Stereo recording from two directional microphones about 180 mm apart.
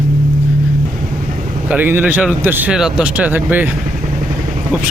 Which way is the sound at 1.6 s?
10° right (ahead or behind).